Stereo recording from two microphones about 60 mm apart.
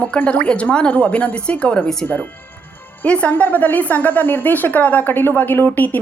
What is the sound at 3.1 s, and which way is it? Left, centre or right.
A woman's voice, left.